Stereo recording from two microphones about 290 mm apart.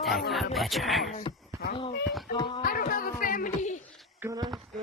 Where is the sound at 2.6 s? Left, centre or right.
Left.